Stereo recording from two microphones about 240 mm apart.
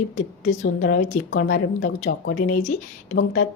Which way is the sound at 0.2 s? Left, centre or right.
Left.